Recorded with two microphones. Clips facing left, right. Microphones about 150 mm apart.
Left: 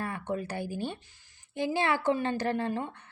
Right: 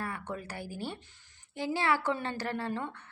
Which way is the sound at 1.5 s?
20° left (ahead or behind).